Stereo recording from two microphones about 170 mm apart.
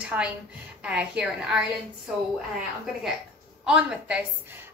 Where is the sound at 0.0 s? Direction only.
5° right (ahead or behind).